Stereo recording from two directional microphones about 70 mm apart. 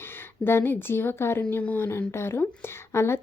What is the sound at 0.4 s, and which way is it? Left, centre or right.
Speech, left.